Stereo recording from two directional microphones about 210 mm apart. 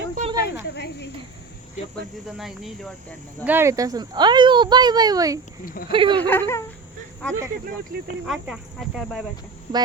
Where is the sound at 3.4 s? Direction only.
10° right (ahead or behind).